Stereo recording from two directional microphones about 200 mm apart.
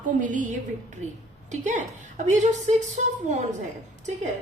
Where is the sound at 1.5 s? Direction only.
35° right (ahead or behind).